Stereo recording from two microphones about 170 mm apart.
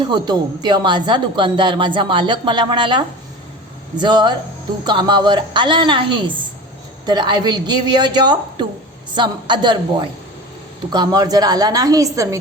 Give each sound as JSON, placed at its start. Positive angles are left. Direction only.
{"t": 0.1, "sound": "speech", "side_deg": -25}